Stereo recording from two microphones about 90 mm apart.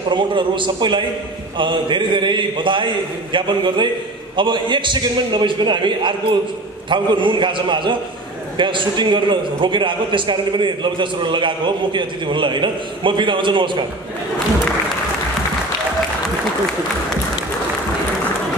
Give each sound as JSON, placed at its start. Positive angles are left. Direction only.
{"t": 0.1, "sound": "a man's voice", "side_deg": -65}